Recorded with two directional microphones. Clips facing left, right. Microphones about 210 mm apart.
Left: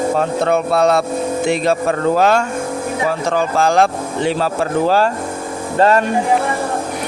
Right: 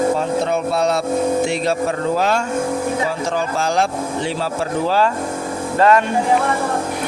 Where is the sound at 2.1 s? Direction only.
55° left (ahead or behind).